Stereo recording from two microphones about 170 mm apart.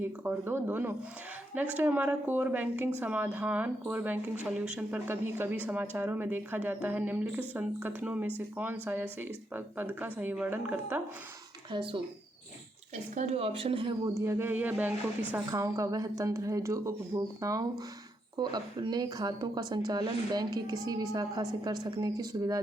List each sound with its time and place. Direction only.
0.0 s speech: 15° right (ahead or behind)
11.7 s speech: 30° right (ahead or behind)
13.1 s speech: 40° right (ahead or behind)
14.1 s a woman's voice: 15° right (ahead or behind)